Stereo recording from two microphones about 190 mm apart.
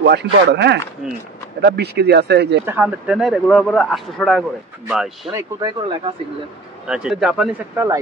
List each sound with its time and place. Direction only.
0.0 s speech: 65° right (ahead or behind)
2.6 s speech: 10° right (ahead or behind)
5.3 s speech: 20° right (ahead or behind)
6.9 s speech: 5° right (ahead or behind)